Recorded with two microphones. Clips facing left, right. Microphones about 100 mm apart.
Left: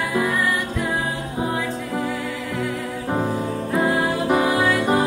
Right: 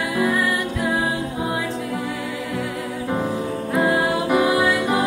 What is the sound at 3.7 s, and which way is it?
Music, 15° right (ahead or behind).